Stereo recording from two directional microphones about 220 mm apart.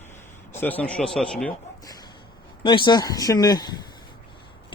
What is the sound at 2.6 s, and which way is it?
A man's voice, 20° left (ahead or behind).